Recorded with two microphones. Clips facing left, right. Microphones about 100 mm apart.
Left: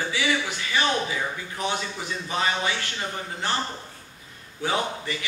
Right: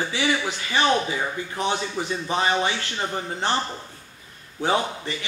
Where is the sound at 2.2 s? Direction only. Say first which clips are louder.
Right 3 dB; 30° right (ahead or behind).